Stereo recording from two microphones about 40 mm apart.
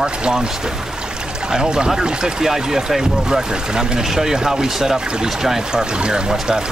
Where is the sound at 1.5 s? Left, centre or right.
Centre.